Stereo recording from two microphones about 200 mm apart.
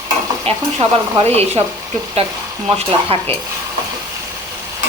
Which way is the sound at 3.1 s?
30° right (ahead or behind).